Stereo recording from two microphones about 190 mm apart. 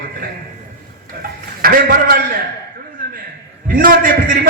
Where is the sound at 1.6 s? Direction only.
50° right (ahead or behind).